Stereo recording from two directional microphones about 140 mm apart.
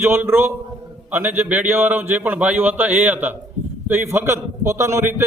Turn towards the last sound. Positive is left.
turn(degrees=-15)  # may be behind; listen again after turning